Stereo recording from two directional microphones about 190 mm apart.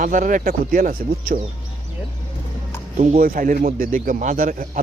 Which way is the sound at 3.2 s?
45° right (ahead or behind).